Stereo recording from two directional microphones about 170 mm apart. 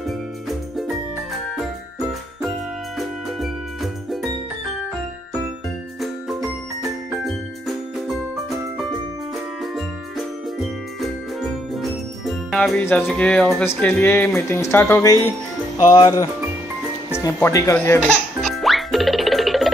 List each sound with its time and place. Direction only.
1.6 s jingle: 5° right (ahead or behind)
3.0 s music: centre (ahead or behind)
5.9 s music: centre (ahead or behind)
9.8 s jingle bell: centre (ahead or behind)
13.7 s speech: 10° left (ahead or behind)
18.4 s music: centre (ahead or behind)